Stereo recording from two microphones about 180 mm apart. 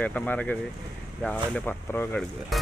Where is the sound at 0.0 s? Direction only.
10° left (ahead or behind).